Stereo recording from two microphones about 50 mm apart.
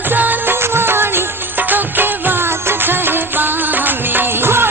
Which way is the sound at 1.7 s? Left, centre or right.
Right.